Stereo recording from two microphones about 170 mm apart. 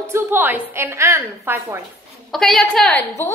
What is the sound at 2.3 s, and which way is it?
A woman's voice, centre (ahead or behind).